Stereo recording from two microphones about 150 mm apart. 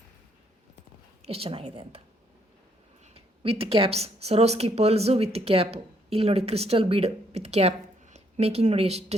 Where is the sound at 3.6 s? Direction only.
40° right (ahead or behind).